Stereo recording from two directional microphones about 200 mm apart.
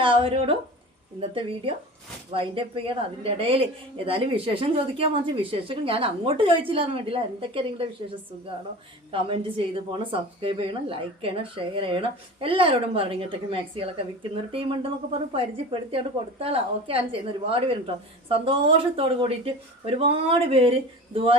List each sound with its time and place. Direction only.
0.0 s a woman's voice: 25° right (ahead or behind)
2.3 s a woman's voice: 25° right (ahead or behind)
9.9 s a woman's voice: 25° right (ahead or behind)